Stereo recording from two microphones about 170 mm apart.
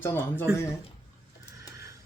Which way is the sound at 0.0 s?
10° left (ahead or behind).